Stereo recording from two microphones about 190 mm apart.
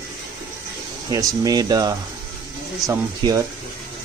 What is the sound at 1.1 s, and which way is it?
Speech, 20° right (ahead or behind).